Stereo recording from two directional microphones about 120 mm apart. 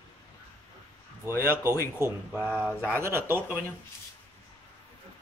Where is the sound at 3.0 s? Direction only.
20° right (ahead or behind).